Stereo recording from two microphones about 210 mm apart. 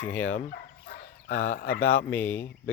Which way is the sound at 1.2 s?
40° left (ahead or behind).